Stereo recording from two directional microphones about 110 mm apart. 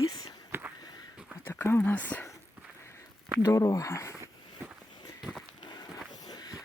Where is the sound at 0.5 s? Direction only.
20° right (ahead or behind).